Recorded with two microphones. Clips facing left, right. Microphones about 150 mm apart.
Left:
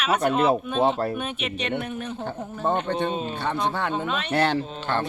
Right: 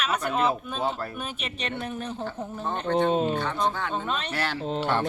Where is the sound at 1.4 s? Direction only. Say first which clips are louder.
Left 5 dB; 35° right (ahead or behind).